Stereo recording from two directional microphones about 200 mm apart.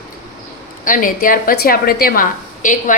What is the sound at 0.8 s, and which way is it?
A woman's voice, 40° left (ahead or behind).